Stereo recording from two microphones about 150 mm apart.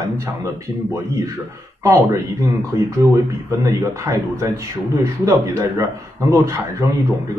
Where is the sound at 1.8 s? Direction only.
20° right (ahead or behind).